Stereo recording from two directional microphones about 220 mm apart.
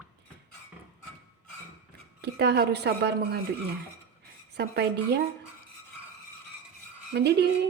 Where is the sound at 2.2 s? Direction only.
50° right (ahead or behind).